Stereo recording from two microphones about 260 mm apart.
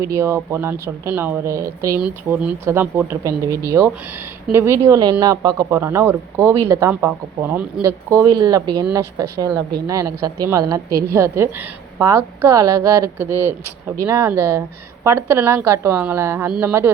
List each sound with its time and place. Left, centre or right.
0.0 s speech: centre